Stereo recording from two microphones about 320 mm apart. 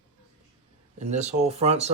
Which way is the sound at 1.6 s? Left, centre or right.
Centre.